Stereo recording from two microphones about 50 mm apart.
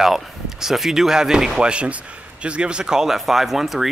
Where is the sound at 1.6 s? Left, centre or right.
Right; by 3.9 s centre.